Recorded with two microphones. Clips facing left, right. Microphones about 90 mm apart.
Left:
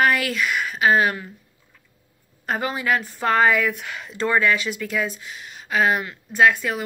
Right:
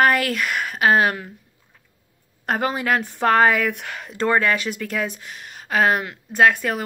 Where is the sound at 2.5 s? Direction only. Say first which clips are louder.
Right 2 dB; 55° right (ahead or behind).